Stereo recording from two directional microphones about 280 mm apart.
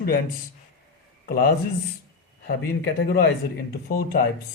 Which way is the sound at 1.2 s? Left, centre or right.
Left.